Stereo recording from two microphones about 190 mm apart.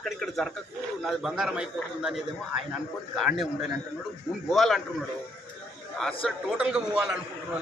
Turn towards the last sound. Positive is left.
turn(degrees=-5)  # may be behind; listen again after turning